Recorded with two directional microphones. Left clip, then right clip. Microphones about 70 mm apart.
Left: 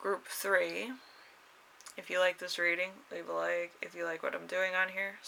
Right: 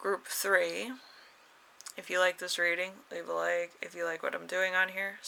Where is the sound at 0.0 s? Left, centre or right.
Right.